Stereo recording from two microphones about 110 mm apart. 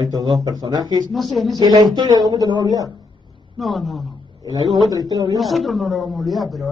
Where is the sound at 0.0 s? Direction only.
35° right (ahead or behind).